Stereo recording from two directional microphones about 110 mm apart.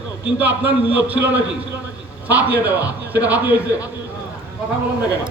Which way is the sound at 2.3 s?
15° right (ahead or behind).